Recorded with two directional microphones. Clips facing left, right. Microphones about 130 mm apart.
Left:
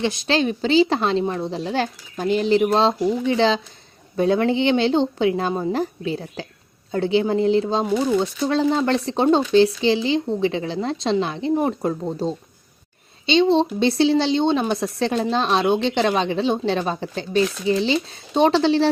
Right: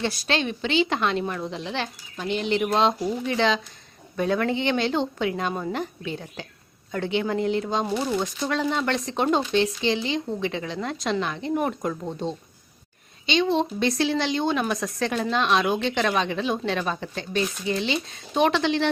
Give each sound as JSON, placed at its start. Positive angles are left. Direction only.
{"t": 0.0, "sound": "speech", "side_deg": 20}
{"t": 0.3, "sound": "speech", "side_deg": 35}